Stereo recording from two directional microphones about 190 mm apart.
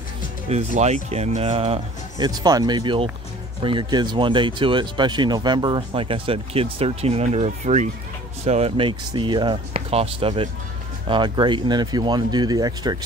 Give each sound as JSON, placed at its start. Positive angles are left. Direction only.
{"t": 0.5, "sound": "speech", "side_deg": -35}